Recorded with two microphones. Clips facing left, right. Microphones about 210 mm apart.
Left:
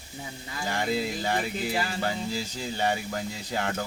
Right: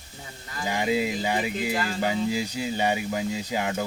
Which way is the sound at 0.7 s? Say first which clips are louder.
Right 3 dB; 15° right (ahead or behind).